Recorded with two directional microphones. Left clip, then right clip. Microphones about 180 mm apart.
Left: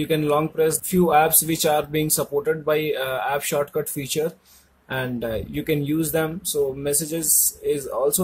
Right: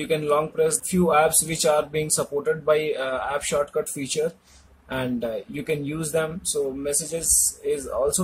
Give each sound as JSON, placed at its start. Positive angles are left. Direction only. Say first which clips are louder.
{"t": 0.1, "sound": "speech", "louder": "even", "side_deg": 20}